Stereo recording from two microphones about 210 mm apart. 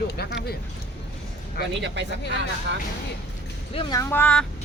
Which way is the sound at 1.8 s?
60° right (ahead or behind).